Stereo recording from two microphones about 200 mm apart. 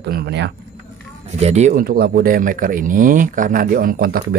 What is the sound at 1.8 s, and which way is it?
Speech, 50° right (ahead or behind).